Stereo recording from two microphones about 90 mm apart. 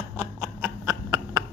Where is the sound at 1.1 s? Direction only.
50° right (ahead or behind).